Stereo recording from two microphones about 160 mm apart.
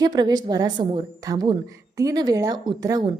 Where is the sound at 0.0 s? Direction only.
25° right (ahead or behind).